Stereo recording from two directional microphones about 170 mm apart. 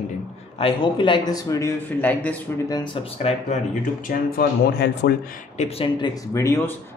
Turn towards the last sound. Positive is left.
turn(degrees=15)  # may be behind; listen again after turning